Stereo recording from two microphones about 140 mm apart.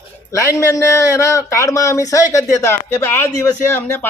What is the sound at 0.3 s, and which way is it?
A man's voice, 25° left (ahead or behind).